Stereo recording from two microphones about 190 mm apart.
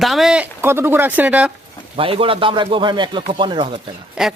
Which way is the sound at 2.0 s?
30° right (ahead or behind).